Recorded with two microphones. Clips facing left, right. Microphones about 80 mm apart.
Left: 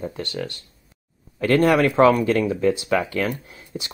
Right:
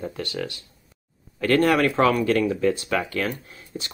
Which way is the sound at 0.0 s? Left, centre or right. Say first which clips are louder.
Left 1 dB; centre.